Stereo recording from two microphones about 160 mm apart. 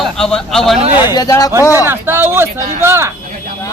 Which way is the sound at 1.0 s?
25° left (ahead or behind).